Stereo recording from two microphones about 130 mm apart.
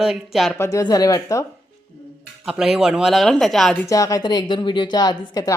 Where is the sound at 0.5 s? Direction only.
20° left (ahead or behind).